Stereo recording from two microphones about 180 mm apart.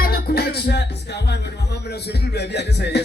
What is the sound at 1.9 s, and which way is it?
A man's voice, 65° left (ahead or behind).